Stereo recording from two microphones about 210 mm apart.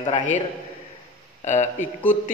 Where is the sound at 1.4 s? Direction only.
35° left (ahead or behind).